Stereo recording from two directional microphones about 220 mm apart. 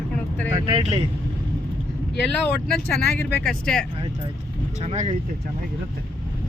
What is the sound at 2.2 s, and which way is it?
Speech, 5° left (ahead or behind).